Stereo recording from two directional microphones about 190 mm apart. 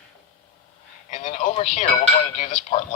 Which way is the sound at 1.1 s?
40° left (ahead or behind).